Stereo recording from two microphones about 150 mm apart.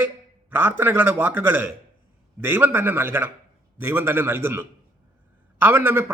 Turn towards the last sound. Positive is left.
turn(degrees=-15)  # may be behind; listen again after turning